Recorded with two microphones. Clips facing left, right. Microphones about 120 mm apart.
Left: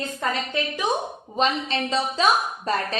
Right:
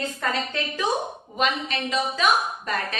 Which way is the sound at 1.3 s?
30° left (ahead or behind).